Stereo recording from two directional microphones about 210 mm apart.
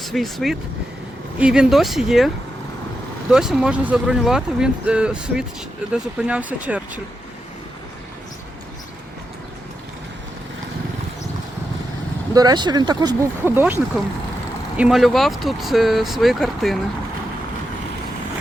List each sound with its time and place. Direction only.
0.0 s speech: centre (ahead or behind)
12.3 s speech: 20° right (ahead or behind); by 16.7 s centre (ahead or behind)